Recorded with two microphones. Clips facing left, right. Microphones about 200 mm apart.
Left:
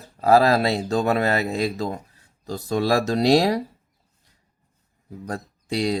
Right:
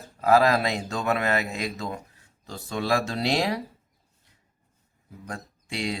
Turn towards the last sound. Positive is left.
turn(degrees=40)  # may be behind; listen again after turning